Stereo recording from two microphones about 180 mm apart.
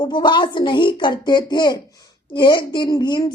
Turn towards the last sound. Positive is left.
turn(degrees=20)  # may be behind; listen again after turning